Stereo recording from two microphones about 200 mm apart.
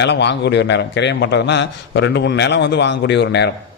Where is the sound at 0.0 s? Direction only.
60° left (ahead or behind).